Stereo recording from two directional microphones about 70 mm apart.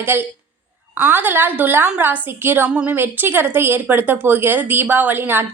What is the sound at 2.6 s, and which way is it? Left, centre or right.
Speech, centre.